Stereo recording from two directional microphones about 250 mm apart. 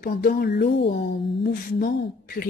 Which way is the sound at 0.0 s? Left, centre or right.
Left.